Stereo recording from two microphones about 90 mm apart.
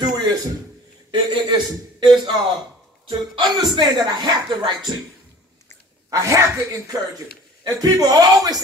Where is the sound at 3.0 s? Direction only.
60° right (ahead or behind).